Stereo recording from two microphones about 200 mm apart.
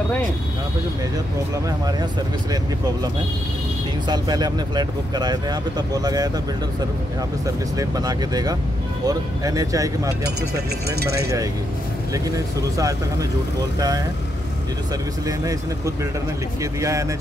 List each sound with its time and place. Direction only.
4.1 s speech: 20° right (ahead or behind)
7.7 s speech: 15° right (ahead or behind)
12.7 s speech: 15° right (ahead or behind)
15.2 s speech: 15° right (ahead or behind)